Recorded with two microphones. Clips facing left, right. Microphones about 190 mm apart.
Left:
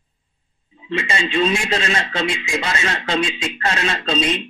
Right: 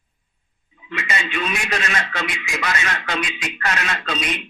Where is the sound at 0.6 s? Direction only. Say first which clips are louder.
Left 5 dB; 25° left (ahead or behind).